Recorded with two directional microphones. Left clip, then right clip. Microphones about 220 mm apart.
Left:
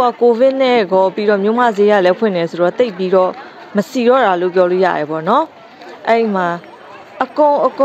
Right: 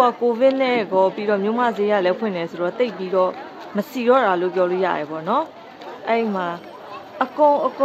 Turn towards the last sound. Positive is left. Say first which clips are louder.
# left 5 dB
turn(degrees=30)  # may be behind; listen again after turning